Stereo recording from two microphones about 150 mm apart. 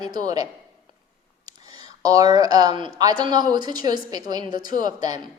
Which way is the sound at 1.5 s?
25° right (ahead or behind).